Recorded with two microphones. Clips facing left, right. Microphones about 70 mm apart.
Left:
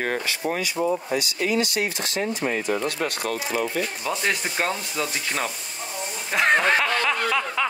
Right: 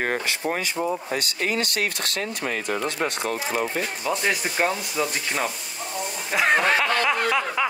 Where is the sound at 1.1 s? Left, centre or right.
Right.